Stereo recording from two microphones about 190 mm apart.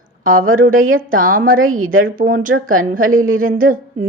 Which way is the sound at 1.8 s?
90° right.